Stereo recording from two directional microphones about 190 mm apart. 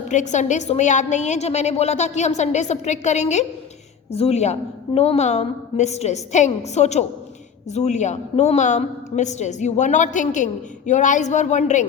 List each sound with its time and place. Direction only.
0.1 s a woman's voice: 40° left (ahead or behind)